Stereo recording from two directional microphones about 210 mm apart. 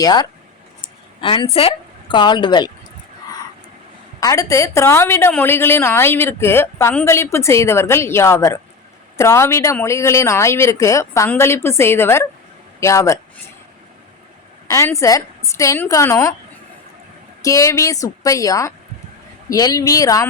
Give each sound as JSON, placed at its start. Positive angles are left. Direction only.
{"t": 0.0, "sound": "a woman's voice", "side_deg": 20}
{"t": 4.2, "sound": "a woman's voice", "side_deg": 15}
{"t": 14.7, "sound": "a woman's voice", "side_deg": 15}
{"t": 17.4, "sound": "a woman's voice", "side_deg": 15}